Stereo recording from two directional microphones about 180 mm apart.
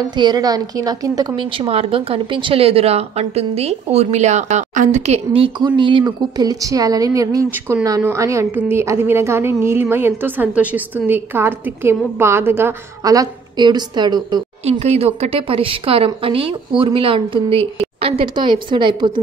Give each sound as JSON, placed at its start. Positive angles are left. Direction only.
{"t": 0.1, "sound": "a woman's voice", "side_deg": -25}
{"t": 14.6, "sound": "speech", "side_deg": -35}